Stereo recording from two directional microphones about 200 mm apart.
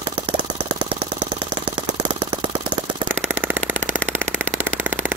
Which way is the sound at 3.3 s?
10° right (ahead or behind).